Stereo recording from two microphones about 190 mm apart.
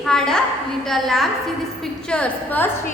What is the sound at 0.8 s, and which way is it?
A woman's voice, centre (ahead or behind).